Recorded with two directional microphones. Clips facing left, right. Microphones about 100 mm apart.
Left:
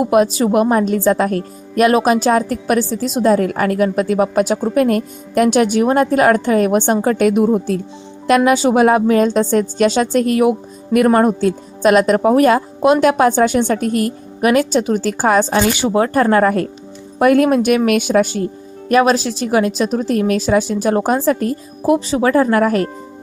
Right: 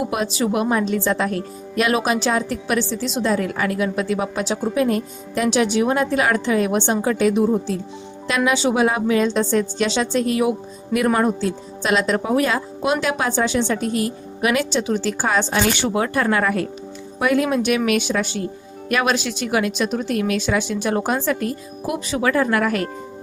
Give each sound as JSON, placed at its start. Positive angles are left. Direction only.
{"t": 0.0, "sound": "a woman's voice", "side_deg": 45}
{"t": 17.2, "sound": "a woman's voice", "side_deg": 50}